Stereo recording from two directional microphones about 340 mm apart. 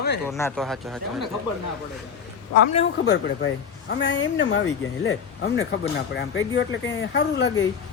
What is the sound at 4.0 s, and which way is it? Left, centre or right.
Speech, left.